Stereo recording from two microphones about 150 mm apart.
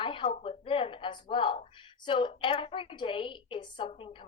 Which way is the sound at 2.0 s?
35° left (ahead or behind).